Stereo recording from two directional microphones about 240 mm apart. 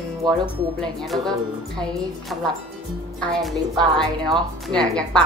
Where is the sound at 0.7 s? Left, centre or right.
Centre.